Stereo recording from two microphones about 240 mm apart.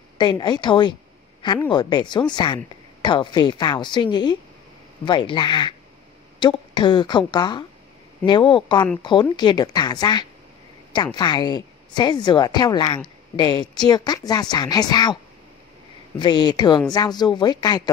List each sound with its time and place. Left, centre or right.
0.2 s a woman's voice: centre
16.2 s speech: centre